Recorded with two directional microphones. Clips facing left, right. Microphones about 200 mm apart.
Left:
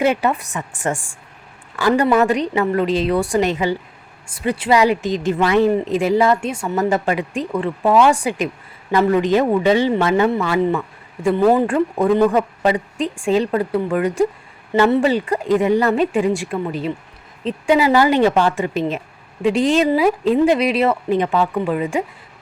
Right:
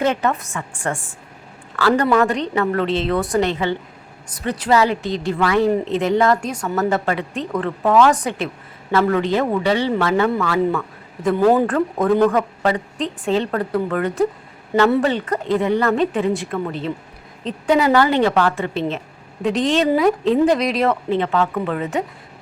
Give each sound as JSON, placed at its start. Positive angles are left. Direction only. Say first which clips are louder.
{"t": 0.0, "sound": "speech", "louder": "left 2 dB", "side_deg": 10}
{"t": 5.9, "sound": "speech", "louder": "left 1 dB", "side_deg": 10}
{"t": 11.3, "sound": "speech", "louder": "even", "side_deg": 0}
{"t": 11.6, "sound": "speech", "louder": "left 1 dB", "side_deg": 10}